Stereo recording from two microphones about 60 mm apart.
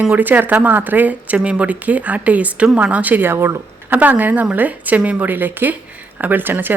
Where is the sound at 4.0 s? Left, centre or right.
Right.